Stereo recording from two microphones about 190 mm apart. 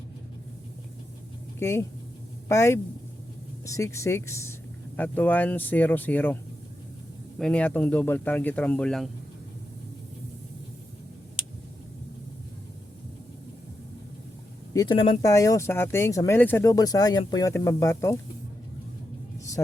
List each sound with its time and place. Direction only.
1.5 s speech: 15° left (ahead or behind)
14.7 s speech: 20° left (ahead or behind)